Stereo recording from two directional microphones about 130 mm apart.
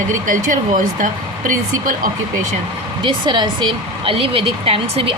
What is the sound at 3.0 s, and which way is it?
A woman's voice, 35° right (ahead or behind).